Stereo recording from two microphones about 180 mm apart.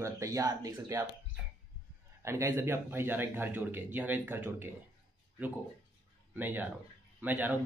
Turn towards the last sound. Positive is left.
turn(degrees=-10)  # may be behind; listen again after turning